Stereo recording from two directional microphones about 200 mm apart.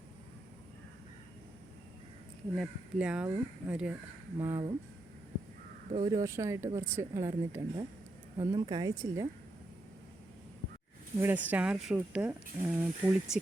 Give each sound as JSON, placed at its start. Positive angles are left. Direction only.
{"t": 2.6, "sound": "speech", "side_deg": -5}
{"t": 5.9, "sound": "speech", "side_deg": -20}
{"t": 11.2, "sound": "speech", "side_deg": -10}